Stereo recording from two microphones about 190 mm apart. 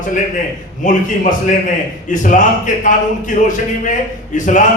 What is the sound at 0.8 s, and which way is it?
A man's voice, 40° left (ahead or behind).